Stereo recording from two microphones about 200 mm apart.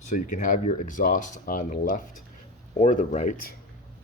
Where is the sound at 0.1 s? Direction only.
40° left (ahead or behind).